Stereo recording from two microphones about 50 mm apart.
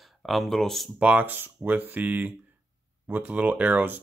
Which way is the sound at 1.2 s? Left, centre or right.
Right.